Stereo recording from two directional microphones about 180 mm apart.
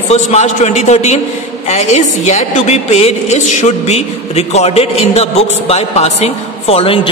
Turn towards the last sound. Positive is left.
turn(degrees=35)  # may be behind; listen again after turning